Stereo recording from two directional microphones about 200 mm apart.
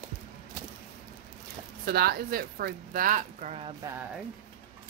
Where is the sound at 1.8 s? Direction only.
50° right (ahead or behind); by 3.7 s 35° right (ahead or behind).